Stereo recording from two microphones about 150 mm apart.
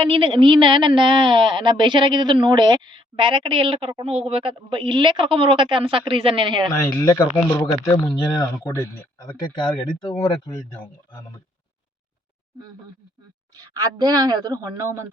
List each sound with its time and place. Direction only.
0.0 s a woman's voice: 35° right (ahead or behind)
6.7 s speech: 20° left (ahead or behind)
13.6 s a woman's voice: 25° right (ahead or behind)